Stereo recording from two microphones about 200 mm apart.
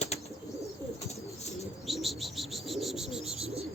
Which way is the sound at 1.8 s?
Centre (ahead or behind).